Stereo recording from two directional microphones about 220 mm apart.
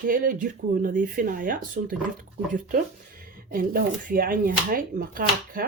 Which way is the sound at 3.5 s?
40° right (ahead or behind).